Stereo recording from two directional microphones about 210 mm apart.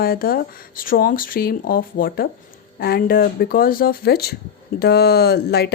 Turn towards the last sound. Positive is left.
turn(degrees=50)  # may be behind; listen again after turning